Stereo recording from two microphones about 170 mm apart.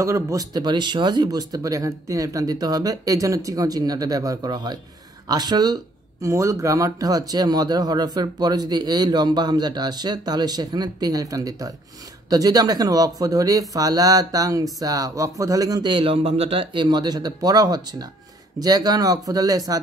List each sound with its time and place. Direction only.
0.0 s speech: 20° right (ahead or behind)